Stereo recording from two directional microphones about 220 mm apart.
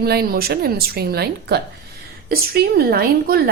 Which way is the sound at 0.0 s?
45° right (ahead or behind).